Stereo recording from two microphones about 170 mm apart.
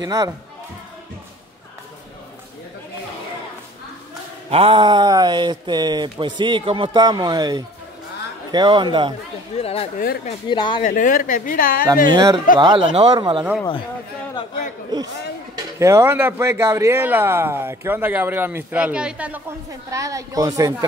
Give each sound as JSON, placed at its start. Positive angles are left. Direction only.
{"t": 0.0, "sound": "speech", "side_deg": -20}
{"t": 4.5, "sound": "speech", "side_deg": -35}
{"t": 9.6, "sound": "speech", "side_deg": 35}
{"t": 10.8, "sound": "speech", "side_deg": 50}
{"t": 12.1, "sound": "speech", "side_deg": -20}
{"t": 14.9, "sound": "speech", "side_deg": -25}
{"t": 19.9, "sound": "speech", "side_deg": -20}